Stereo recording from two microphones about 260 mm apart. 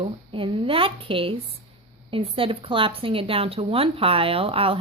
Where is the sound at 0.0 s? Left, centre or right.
Centre.